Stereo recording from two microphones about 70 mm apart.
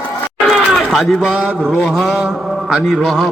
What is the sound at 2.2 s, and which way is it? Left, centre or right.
Mantra, centre.